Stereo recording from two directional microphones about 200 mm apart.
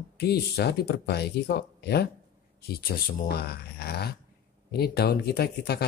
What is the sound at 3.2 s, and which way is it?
Speech, 50° left (ahead or behind).